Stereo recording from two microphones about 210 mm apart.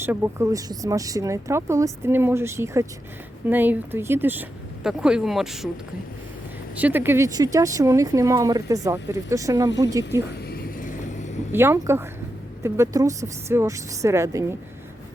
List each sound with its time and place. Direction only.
0.0 s speech: 10° right (ahead or behind)
6.7 s speech: 10° right (ahead or behind)
10.5 s vehicle: 40° left (ahead or behind)
11.5 s speech: 10° right (ahead or behind)